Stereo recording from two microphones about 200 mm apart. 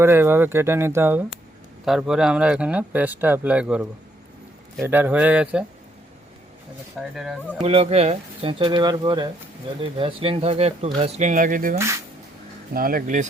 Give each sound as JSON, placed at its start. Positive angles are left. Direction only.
{"t": 0.0, "sound": "speech", "side_deg": -10}
{"t": 1.8, "sound": "speech", "side_deg": 0}
{"t": 7.0, "sound": "speech", "side_deg": 0}
{"t": 7.6, "sound": "speech", "side_deg": -30}